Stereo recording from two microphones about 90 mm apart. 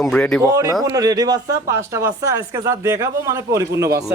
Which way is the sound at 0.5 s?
35° right (ahead or behind).